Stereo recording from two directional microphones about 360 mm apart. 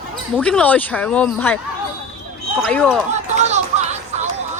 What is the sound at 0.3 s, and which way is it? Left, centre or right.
Speech, centre.